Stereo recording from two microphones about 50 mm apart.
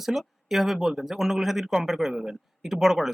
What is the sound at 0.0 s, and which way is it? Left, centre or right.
Speech, centre.